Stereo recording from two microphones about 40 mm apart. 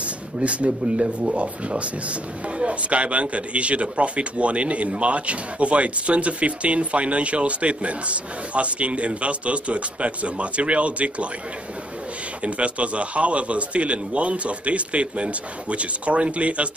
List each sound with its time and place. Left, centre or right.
0.0 s a man's voice: right
12.4 s a man's voice: right